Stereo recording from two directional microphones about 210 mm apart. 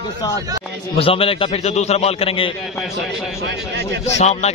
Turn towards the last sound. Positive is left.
turn(degrees=30)  # may be behind; listen again after turning